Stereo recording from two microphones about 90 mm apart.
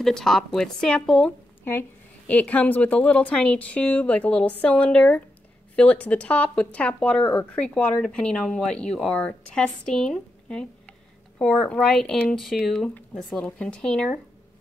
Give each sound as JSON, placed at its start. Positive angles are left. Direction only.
{"t": 0.0, "sound": "speech", "side_deg": 5}
{"t": 1.6, "sound": "speech", "side_deg": 25}